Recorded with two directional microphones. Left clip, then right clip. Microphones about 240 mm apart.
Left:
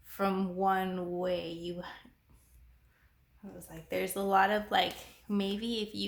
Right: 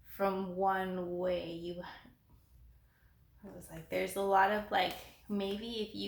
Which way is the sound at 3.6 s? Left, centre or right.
Left.